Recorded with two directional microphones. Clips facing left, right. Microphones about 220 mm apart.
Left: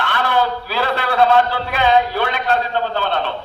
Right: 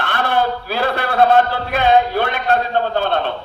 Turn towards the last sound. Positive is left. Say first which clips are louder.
# right 2 dB
turn(degrees=-50)  # may be behind; listen again after turning